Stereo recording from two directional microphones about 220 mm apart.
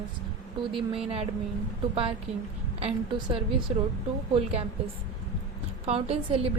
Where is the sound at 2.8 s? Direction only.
25° right (ahead or behind).